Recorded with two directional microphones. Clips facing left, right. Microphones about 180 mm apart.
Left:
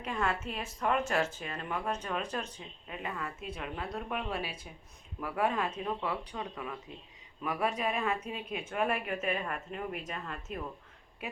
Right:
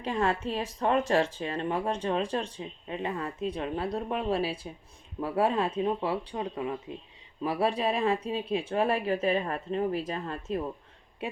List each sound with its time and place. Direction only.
0.0 s speech: 30° right (ahead or behind)